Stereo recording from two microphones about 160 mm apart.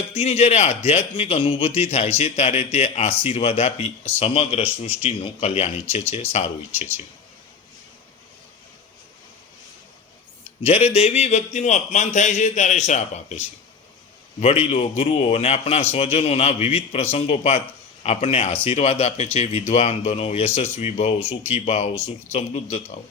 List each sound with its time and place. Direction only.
0.1 s a man's voice: 40° left (ahead or behind)
10.6 s speech: 40° left (ahead or behind)
14.4 s a man's voice: 40° left (ahead or behind)